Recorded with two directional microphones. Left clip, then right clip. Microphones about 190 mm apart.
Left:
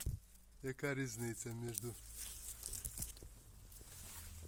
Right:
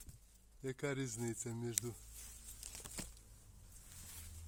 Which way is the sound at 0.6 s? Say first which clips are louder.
Even; 10° right (ahead or behind).